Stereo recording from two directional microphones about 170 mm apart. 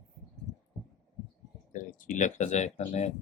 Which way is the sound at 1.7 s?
50° left (ahead or behind).